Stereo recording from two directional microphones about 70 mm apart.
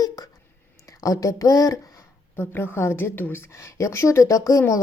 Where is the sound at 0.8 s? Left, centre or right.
Left.